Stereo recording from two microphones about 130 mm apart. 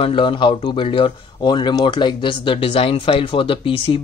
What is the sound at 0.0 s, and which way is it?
Speech, 40° left (ahead or behind).